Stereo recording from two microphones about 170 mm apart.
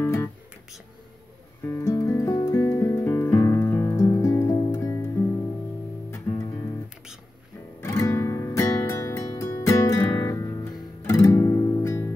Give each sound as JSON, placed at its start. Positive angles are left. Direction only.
{"t": 0.0, "sound": "music", "side_deg": 15}
{"t": 1.6, "sound": "music", "side_deg": 15}
{"t": 6.1, "sound": "music", "side_deg": 15}
{"t": 7.8, "sound": "music", "side_deg": 20}